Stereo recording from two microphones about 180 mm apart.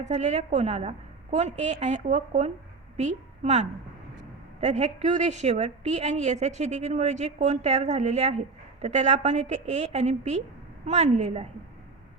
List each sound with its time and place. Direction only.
0.0 s a woman's voice: 40° right (ahead or behind)